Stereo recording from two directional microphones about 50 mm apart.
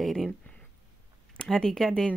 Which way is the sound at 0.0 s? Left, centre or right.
Centre.